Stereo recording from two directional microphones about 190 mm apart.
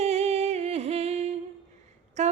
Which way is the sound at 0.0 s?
35° right (ahead or behind).